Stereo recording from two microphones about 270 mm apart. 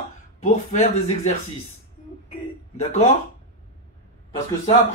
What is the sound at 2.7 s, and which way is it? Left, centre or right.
Speech, left.